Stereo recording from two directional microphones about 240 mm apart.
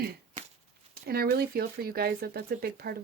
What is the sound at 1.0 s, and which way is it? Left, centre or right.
Speech, right.